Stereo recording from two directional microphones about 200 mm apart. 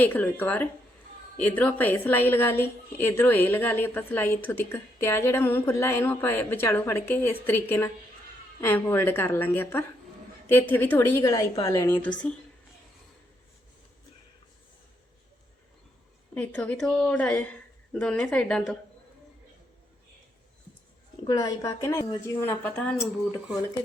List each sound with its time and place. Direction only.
0.0 s a woman's voice: 10° left (ahead or behind)
16.3 s a woman's voice: 5° left (ahead or behind)
21.2 s a woman's voice: 20° left (ahead or behind)
22.6 s a woman's voice: 5° left (ahead or behind)